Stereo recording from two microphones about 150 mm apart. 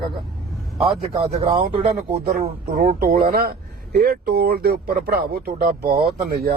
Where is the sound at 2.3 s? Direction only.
85° right.